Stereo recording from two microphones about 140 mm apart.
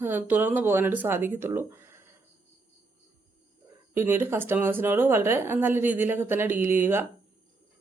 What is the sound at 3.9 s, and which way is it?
Speech, 15° right (ahead or behind).